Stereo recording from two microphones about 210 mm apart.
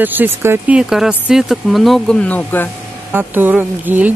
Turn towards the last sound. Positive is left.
turn(degrees=-10)  # may be behind; listen again after turning